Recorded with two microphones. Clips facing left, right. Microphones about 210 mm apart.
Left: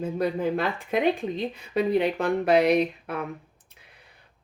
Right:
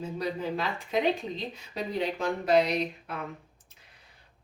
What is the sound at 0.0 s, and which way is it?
A woman's voice, 55° left (ahead or behind).